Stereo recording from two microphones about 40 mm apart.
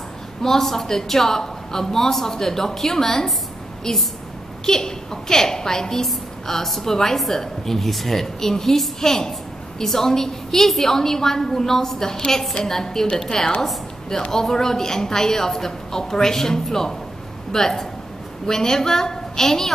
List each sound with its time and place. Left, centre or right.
0.4 s a woman's voice: centre
4.6 s a woman's voice: centre